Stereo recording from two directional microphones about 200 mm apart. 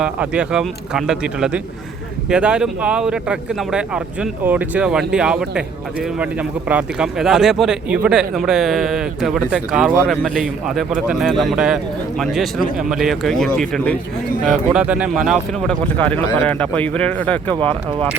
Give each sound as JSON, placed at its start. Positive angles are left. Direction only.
{"t": 0.0, "sound": "speech", "side_deg": -5}
{"t": 6.7, "sound": "speech", "side_deg": -5}
{"t": 17.5, "sound": "speech", "side_deg": -25}